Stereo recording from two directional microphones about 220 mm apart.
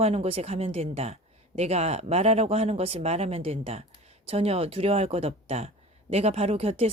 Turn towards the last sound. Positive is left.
turn(degrees=-25)  # may be behind; listen again after turning